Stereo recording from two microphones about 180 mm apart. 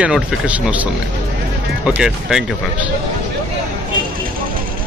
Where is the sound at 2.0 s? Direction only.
5° right (ahead or behind).